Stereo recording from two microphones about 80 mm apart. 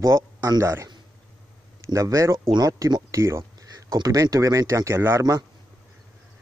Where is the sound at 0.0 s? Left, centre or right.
Right.